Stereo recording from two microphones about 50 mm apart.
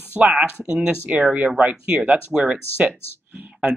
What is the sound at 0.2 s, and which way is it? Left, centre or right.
A man's voice, right.